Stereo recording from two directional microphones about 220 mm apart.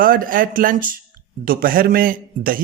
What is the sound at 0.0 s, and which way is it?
A man's voice, 40° right (ahead or behind).